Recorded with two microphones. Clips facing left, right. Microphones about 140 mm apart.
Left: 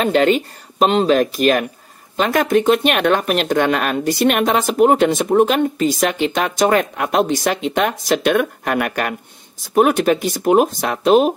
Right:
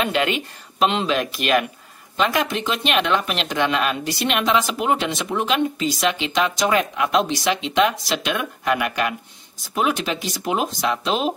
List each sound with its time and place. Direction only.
0.0 s speech: 40° left (ahead or behind)